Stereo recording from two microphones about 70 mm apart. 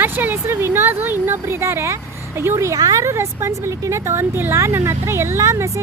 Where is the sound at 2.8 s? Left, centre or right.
Right.